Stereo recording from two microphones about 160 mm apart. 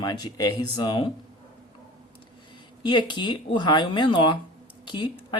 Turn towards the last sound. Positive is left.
turn(degrees=30)  # may be behind; listen again after turning